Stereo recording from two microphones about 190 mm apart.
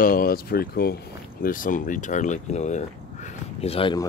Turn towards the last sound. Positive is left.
turn(degrees=30)  # may be behind; listen again after turning